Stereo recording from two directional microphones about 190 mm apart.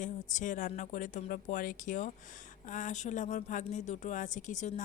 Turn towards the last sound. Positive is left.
turn(degrees=40)  # may be behind; listen again after turning